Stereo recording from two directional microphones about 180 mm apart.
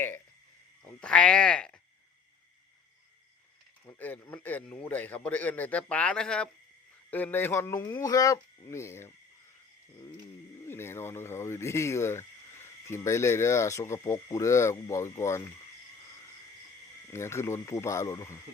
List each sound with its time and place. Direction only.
0.9 s speech: 5° left (ahead or behind)
3.8 s a man's voice: 10° left (ahead or behind)
10.7 s a man's voice: 15° left (ahead or behind)
17.1 s a man's voice: 15° left (ahead or behind)